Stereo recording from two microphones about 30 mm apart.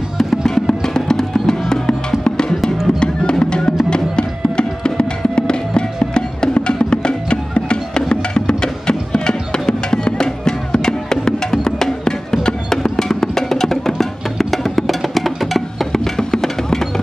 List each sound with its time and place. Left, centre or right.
0.2 s music: centre; by 2.4 s left
3.0 s drum: left
3.9 s music: left; by 15.9 s centre
15.9 s music: centre